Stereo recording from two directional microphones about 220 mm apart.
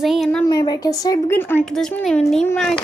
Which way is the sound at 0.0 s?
Centre (ahead or behind).